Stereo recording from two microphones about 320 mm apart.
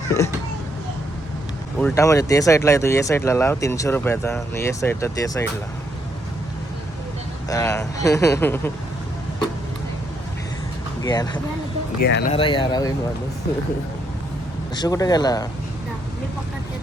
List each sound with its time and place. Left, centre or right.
1.8 s speech: centre
7.5 s speech: centre
11.0 s speech: centre
12.0 s speech: left
12.3 s speech: centre
14.8 s speech: centre